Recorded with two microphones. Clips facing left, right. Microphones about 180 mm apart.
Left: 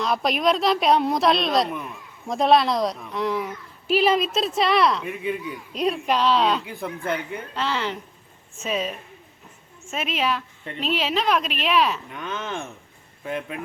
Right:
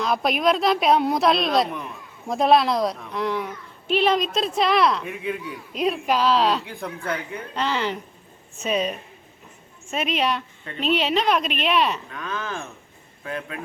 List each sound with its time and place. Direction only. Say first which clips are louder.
0.0 s speech: right 1 dB; centre (ahead or behind)
12.1 s speech: even; 25° left (ahead or behind)